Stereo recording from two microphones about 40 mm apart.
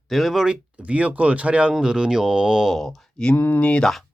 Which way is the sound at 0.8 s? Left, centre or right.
Right.